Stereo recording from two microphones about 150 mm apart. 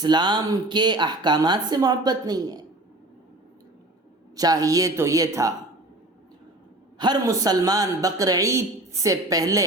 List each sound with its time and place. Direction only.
0.0 s speech: 30° right (ahead or behind)
4.4 s speech: 25° right (ahead or behind)
7.0 s speech: 25° right (ahead or behind)